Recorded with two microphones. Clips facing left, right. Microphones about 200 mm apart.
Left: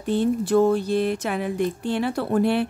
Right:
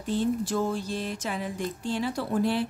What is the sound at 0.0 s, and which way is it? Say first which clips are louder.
Speech: left 5 dB; 60° left (ahead or behind).